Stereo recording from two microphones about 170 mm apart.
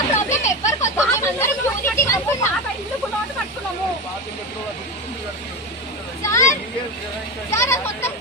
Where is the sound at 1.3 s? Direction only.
15° left (ahead or behind).